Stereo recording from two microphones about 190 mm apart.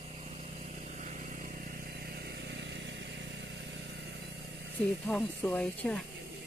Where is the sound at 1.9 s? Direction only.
60° right (ahead or behind).